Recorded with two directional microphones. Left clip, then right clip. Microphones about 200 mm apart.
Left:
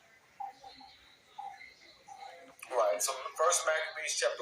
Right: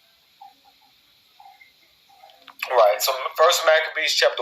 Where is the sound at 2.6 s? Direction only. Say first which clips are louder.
Right 13 dB; 55° right (ahead or behind).